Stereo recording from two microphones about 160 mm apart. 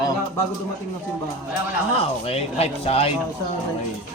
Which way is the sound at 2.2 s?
40° left (ahead or behind).